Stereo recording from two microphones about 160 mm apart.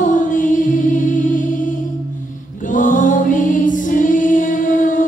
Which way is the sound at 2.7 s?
55° left (ahead or behind).